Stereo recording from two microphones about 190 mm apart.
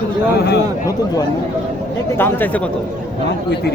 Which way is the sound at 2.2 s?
10° left (ahead or behind).